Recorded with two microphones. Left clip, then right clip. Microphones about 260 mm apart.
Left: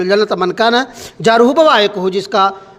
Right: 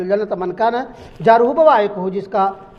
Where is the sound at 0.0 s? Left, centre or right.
Left.